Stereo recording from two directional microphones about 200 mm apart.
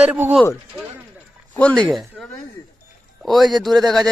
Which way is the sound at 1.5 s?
5° left (ahead or behind).